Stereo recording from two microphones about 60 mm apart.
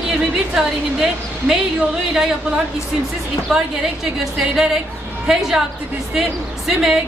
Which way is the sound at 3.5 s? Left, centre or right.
Centre.